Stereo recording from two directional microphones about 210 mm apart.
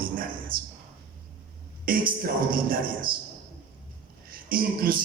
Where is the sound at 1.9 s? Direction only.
45° right (ahead or behind).